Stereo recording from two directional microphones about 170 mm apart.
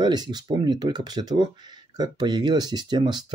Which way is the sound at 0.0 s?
25° right (ahead or behind).